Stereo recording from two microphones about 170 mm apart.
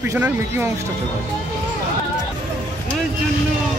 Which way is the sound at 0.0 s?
15° right (ahead or behind).